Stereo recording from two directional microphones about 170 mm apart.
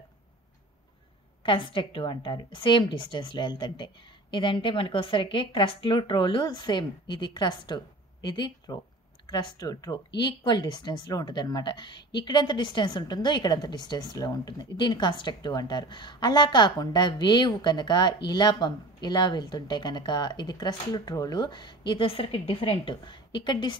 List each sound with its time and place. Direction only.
1.4 s speech: 30° left (ahead or behind)